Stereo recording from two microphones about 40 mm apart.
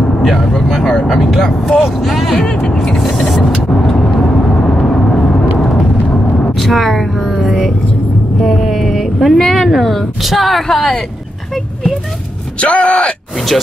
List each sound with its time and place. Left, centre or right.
0.2 s speech: centre
0.7 s speech: centre
2.6 s speech: centre
6.6 s a sound: centre
8.4 s speech: centre
12.5 s speech: left
13.5 s speech: centre